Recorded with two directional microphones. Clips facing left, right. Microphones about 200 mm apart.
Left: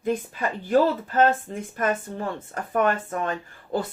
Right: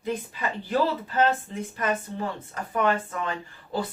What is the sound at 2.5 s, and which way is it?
A woman's voice, 50° left (ahead or behind).